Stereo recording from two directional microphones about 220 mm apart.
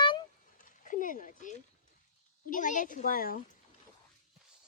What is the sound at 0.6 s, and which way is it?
A woman's voice, 35° left (ahead or behind).